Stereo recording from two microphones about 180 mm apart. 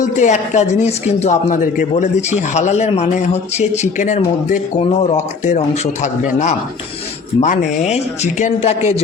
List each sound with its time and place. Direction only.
0.0 s speech: 40° left (ahead or behind)